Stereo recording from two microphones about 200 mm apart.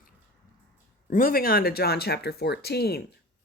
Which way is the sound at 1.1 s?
45° left (ahead or behind).